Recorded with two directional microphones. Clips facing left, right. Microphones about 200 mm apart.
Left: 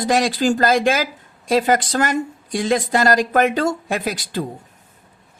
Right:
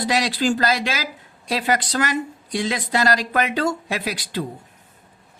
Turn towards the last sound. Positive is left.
turn(degrees=45)  # may be behind; listen again after turning